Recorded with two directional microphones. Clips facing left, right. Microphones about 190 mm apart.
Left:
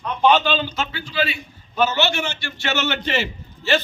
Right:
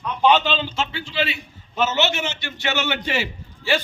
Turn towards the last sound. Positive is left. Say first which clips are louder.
# left 2 dB
turn(degrees=-10)  # may be behind; listen again after turning